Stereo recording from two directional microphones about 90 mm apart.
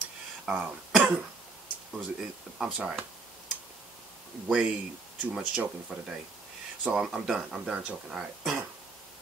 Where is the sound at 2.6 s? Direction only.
10° right (ahead or behind).